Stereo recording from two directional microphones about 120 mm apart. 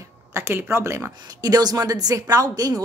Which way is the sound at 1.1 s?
30° right (ahead or behind).